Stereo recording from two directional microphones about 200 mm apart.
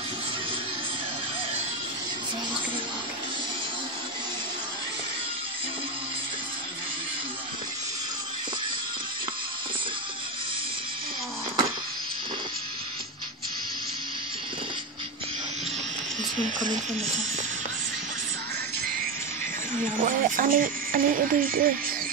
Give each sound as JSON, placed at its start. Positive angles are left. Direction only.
{"t": 19.7, "sound": "speech", "side_deg": -45}